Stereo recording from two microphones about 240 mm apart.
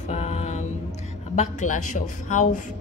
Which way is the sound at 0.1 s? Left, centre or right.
Left.